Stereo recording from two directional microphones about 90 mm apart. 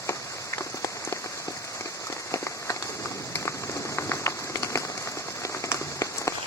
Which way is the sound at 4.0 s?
30° left (ahead or behind).